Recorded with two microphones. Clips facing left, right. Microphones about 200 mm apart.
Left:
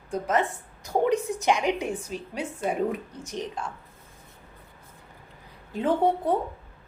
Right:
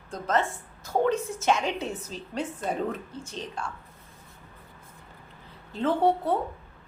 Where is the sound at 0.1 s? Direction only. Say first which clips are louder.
Left 2 dB; 15° left (ahead or behind).